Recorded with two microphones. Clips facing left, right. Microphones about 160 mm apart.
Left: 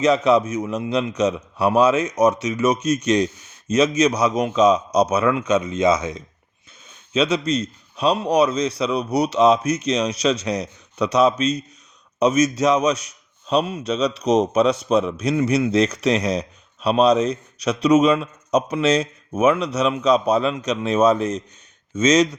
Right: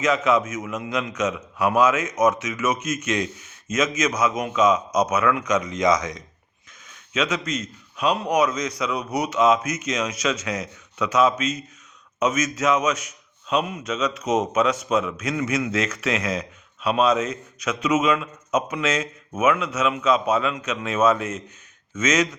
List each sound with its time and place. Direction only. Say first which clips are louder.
0.0 s a man's voice: left 4 dB; 35° left (ahead or behind)